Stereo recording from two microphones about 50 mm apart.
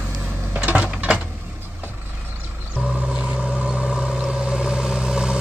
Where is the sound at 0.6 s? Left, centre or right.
Right.